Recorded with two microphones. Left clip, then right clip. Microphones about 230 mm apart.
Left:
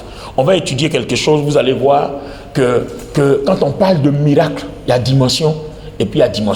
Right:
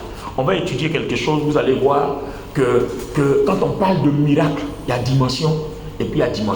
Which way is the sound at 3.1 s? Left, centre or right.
Left.